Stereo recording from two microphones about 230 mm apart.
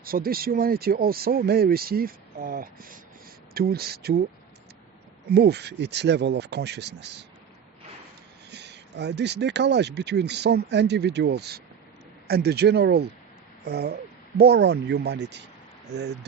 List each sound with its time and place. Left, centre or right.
0.0 s speech: right
5.3 s speech: right
8.4 s speech: right